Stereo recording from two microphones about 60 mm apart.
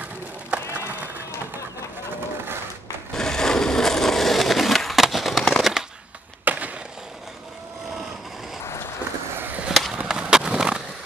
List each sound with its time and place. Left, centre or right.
0.5 s a sound: right
3.2 s skateboard: centre
5.6 s a sound: centre
6.4 s skateboard: right
9.3 s skateboard: right
9.7 s skateboard: centre